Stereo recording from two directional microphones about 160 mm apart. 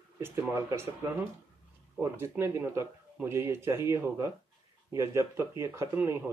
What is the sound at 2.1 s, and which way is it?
Speech, 15° right (ahead or behind).